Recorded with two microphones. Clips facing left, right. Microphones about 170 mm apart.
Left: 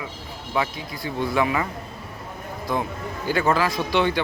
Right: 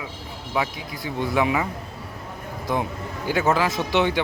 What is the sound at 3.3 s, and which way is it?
Speech, 5° right (ahead or behind).